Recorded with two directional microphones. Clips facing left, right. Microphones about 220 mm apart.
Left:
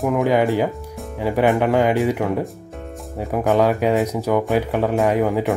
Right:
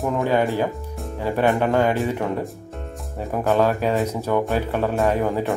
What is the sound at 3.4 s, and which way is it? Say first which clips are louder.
Speech: left 2 dB; 15° left (ahead or behind).